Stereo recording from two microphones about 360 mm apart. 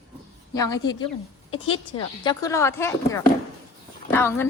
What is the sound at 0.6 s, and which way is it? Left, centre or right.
Speech, centre.